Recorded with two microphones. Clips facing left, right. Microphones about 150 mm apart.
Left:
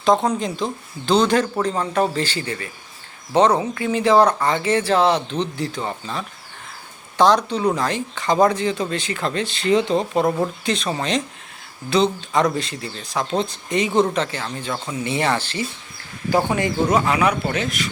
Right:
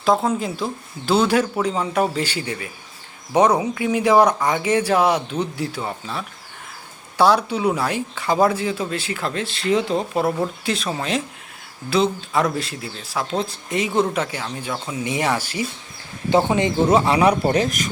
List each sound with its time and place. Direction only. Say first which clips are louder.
0.0 s speech: left 1 dB; 5° right (ahead or behind)
16.3 s speech: right 2 dB; 20° right (ahead or behind); by 17.8 s 40° right (ahead or behind)